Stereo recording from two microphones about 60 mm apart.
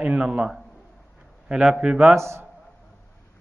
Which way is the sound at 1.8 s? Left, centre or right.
Centre.